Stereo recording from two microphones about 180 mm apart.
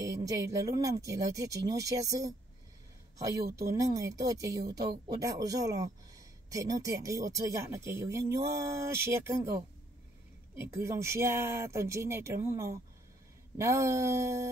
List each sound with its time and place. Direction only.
0.0 s speech: 20° right (ahead or behind)
3.6 s speech: 15° right (ahead or behind)
10.5 s speech: 15° right (ahead or behind)